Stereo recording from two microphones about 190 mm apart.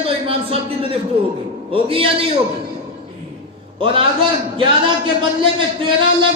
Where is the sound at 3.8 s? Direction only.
25° right (ahead or behind).